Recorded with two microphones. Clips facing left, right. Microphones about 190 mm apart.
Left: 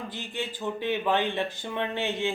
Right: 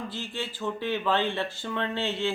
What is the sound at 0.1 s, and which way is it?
Speech, 15° left (ahead or behind).